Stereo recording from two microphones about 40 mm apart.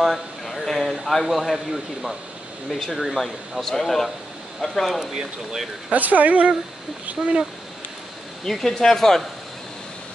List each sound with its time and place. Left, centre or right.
0.0 s a sound: centre
0.9 s speech: centre
3.6 s speech: centre
5.0 s speech: centre
5.9 s speech: right
8.5 s speech: centre